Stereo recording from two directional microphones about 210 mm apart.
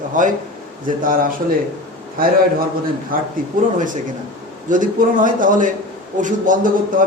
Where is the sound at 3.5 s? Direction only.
40° right (ahead or behind).